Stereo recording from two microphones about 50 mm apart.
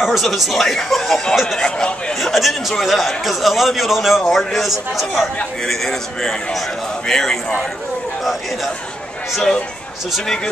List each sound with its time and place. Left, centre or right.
0.0 s a man's voice: centre
1.8 s speech: centre
2.1 s a man's voice: centre
5.6 s a man's voice: centre
10.2 s a man's voice: centre